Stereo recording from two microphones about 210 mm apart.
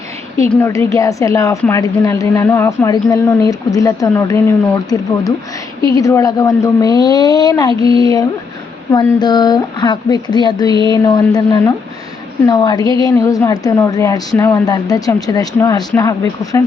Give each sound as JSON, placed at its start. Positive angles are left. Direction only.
{"t": 0.5, "sound": "a woman's voice", "side_deg": 10}